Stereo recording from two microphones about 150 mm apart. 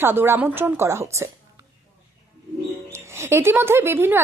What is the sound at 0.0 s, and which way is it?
Speech, 15° right (ahead or behind).